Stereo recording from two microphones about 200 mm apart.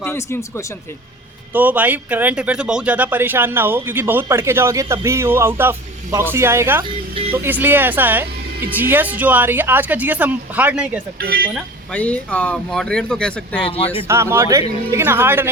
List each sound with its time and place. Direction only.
0.0 s speech: 15° left (ahead or behind)
1.5 s speech: 10° right (ahead or behind)
13.7 s speech: 30° left (ahead or behind)
14.0 s speech: 15° right (ahead or behind)